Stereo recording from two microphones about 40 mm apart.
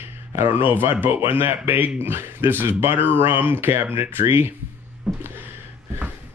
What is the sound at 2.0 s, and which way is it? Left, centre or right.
Speech, right.